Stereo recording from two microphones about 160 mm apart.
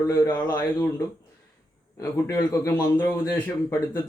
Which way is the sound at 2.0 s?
20° left (ahead or behind).